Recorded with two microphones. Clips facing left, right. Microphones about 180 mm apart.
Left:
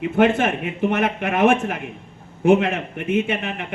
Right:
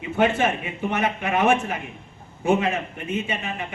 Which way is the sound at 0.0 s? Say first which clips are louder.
Left 4 dB; 55° left (ahead or behind).